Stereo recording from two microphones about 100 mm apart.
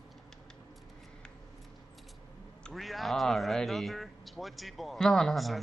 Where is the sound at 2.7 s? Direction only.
Centre (ahead or behind).